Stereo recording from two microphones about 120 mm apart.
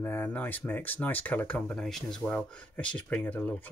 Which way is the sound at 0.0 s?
15° left (ahead or behind).